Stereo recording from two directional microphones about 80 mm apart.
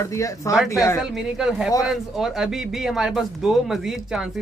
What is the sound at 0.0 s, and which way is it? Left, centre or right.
Speech, left.